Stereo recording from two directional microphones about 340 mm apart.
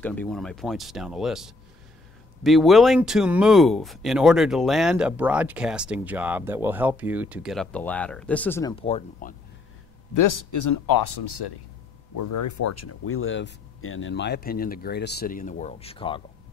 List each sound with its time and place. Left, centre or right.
0.0 s speech: centre
10.1 s speech: left
12.2 s speech: left; by 16.2 s centre